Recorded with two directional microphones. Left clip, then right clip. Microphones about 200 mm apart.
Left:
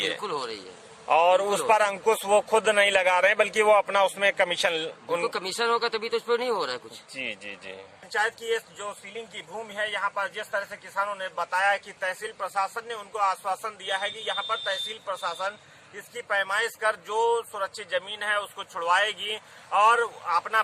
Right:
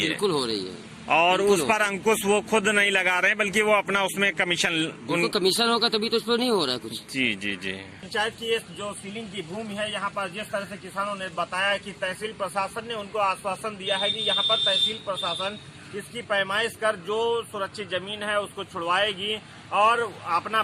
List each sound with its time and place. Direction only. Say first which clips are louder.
0.0 s speech: right 4 dB; 10° left (ahead or behind)
10.5 s speech: left 1 dB; 25° left (ahead or behind)